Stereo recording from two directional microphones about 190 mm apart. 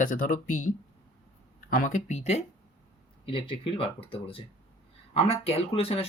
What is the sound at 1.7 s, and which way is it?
Speech, 45° left (ahead or behind).